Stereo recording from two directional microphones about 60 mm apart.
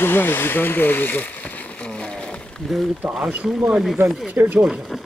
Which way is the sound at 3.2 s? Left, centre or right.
Centre.